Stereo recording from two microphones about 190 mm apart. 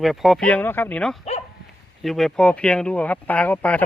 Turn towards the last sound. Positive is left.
turn(degrees=10)  # may be behind; listen again after turning